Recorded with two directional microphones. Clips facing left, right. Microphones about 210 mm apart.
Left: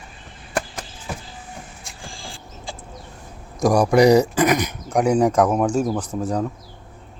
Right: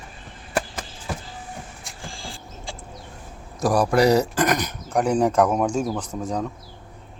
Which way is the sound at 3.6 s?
15° left (ahead or behind).